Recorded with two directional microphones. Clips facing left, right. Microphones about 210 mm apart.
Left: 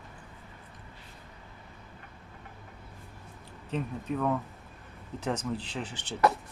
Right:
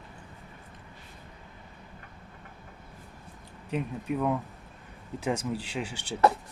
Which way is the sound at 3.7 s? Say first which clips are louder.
Right 2 dB; 10° right (ahead or behind).